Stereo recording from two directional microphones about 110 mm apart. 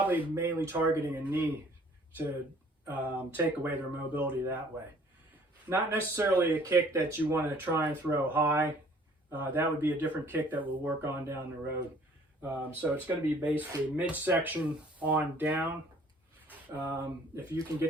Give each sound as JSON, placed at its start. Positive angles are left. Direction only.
{"t": 0.0, "sound": "speech", "side_deg": -15}
{"t": 2.8, "sound": "speech", "side_deg": -15}
{"t": 5.6, "sound": "speech", "side_deg": -20}